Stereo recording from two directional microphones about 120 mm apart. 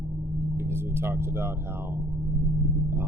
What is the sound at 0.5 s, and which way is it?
Speech, 20° right (ahead or behind).